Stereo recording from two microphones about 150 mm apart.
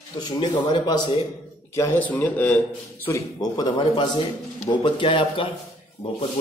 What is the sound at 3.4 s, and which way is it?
Speech, 25° left (ahead or behind).